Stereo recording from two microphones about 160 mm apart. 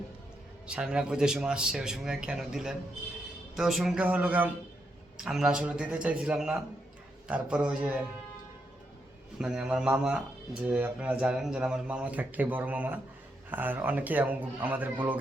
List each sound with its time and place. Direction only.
0.7 s speech: 5° right (ahead or behind)
9.4 s speech: 5° right (ahead or behind)